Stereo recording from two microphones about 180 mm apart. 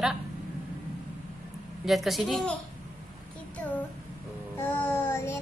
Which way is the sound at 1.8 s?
Centre (ahead or behind).